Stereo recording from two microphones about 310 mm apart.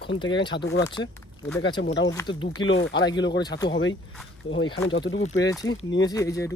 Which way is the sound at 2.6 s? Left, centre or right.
Left.